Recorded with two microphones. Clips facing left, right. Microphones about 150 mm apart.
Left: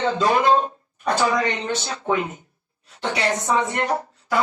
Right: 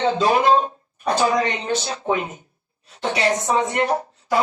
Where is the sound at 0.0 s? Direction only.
25° right (ahead or behind).